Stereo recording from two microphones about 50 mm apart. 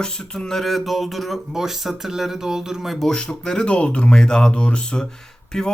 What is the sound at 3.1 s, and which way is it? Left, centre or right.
Speech, centre.